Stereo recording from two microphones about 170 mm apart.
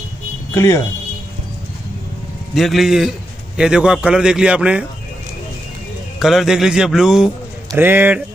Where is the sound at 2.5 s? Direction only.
Centre (ahead or behind).